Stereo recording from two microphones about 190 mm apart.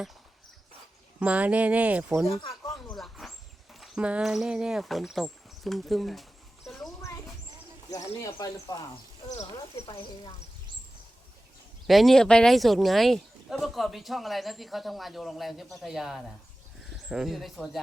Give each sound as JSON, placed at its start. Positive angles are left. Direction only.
{"t": 1.2, "sound": "speech", "side_deg": -5}
{"t": 2.2, "sound": "speech", "side_deg": 15}
{"t": 2.6, "sound": "a sound", "side_deg": 5}
{"t": 7.9, "sound": "speech", "side_deg": 20}
{"t": 11.9, "sound": "speech", "side_deg": 0}